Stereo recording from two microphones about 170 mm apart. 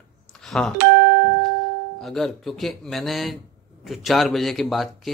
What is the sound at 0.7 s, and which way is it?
Music, 80° right.